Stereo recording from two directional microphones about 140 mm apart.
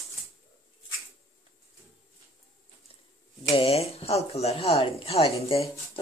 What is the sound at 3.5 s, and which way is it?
Speech, 45° left (ahead or behind).